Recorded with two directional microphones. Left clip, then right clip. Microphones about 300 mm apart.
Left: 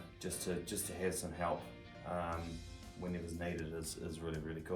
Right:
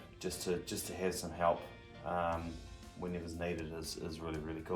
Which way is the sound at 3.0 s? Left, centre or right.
Centre.